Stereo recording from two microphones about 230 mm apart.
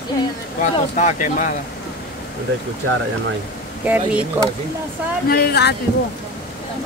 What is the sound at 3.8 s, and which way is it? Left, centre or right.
Speech, centre.